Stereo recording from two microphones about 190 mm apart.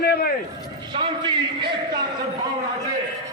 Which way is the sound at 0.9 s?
25° right (ahead or behind).